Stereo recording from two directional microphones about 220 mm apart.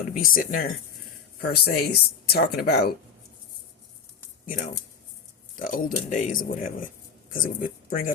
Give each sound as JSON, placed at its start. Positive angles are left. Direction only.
{"t": 0.2, "sound": "speech", "side_deg": 40}
{"t": 4.4, "sound": "speech", "side_deg": 35}